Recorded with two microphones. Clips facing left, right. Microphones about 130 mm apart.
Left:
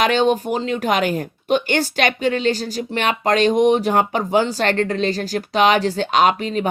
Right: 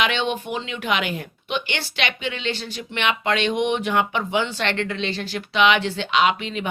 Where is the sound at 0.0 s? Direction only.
40° left (ahead or behind).